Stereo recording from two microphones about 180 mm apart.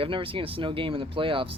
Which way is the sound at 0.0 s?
30° right (ahead or behind).